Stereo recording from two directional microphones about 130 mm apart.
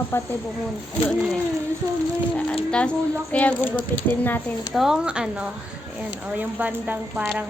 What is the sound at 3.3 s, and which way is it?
Speech, 15° left (ahead or behind).